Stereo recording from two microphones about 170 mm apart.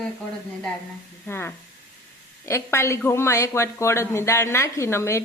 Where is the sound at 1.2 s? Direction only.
15° left (ahead or behind).